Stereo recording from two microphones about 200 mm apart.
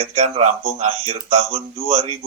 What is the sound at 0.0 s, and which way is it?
Speech, 30° right (ahead or behind).